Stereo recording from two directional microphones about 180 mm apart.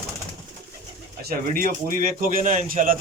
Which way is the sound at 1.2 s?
55° right (ahead or behind).